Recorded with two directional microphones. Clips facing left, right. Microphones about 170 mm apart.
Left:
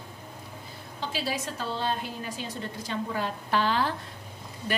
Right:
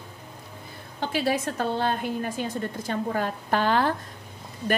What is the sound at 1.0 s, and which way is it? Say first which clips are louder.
A woman's voice: right 7 dB; 55° right (ahead or behind).